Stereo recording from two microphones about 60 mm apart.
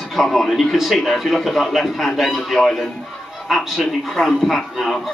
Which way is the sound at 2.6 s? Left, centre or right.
Centre.